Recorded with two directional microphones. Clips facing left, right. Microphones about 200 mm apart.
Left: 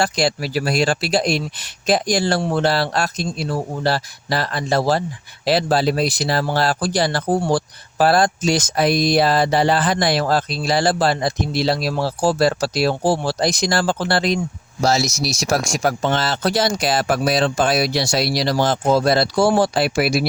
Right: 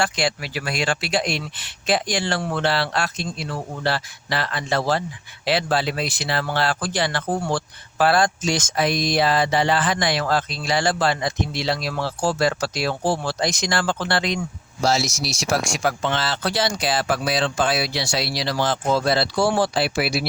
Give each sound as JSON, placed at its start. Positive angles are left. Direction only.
{"t": 0.0, "sound": "speech", "side_deg": 40}